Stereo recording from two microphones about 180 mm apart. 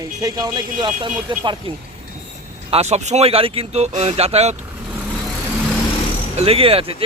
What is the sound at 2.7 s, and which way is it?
Speech, 35° right (ahead or behind).